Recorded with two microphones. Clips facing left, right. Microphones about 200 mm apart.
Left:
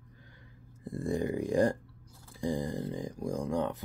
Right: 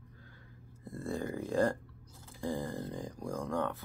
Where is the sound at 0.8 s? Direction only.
15° left (ahead or behind).